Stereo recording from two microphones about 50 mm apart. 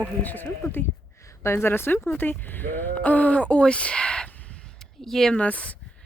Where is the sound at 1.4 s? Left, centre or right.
Left.